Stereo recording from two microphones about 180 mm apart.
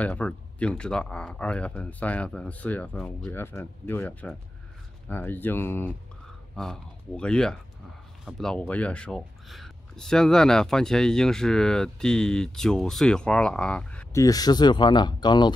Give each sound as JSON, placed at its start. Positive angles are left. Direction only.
{"t": 0.0, "sound": "speech", "side_deg": 10}
{"t": 14.2, "sound": "speech", "side_deg": 20}